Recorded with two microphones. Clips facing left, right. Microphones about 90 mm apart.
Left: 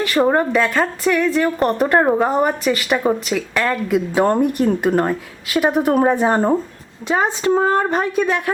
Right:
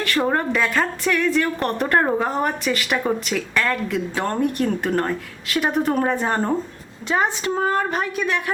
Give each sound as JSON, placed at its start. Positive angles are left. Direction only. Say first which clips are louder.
{"t": 0.0, "sound": "a woman's voice", "louder": "left 5 dB", "side_deg": 10}
{"t": 0.5, "sound": "a woman's voice", "louder": "left 4 dB", "side_deg": 0}
{"t": 4.1, "sound": "a woman's voice", "louder": "left 8 dB", "side_deg": 20}